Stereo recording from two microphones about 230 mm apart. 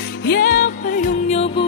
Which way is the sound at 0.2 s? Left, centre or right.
Left.